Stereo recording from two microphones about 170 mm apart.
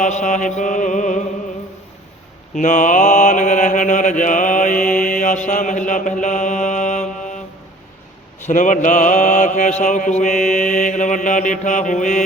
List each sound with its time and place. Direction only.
0.0 s mantra: 45° left (ahead or behind)
2.6 s mantra: 50° left (ahead or behind)
8.4 s mantra: 50° left (ahead or behind)